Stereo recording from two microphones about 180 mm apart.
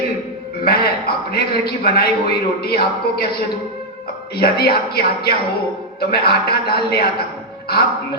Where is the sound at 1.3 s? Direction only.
60° left (ahead or behind).